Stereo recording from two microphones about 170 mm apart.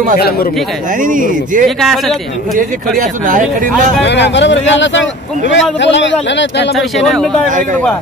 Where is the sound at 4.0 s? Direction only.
90° left.